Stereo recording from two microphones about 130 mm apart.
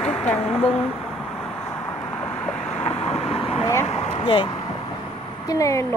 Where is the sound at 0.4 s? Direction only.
55° left (ahead or behind).